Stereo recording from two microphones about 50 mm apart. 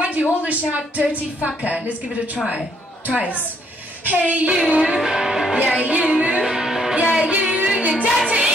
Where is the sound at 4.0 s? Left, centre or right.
Right.